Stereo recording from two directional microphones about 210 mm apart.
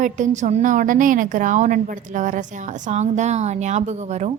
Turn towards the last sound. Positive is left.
turn(degrees=-30)  # may be behind; listen again after turning